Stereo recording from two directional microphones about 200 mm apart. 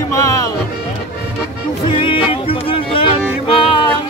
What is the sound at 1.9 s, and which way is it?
Music, 25° left (ahead or behind).